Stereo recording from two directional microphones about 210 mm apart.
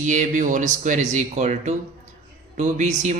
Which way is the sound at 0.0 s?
35° right (ahead or behind).